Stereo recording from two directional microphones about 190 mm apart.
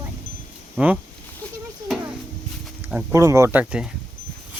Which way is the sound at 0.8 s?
5° right (ahead or behind).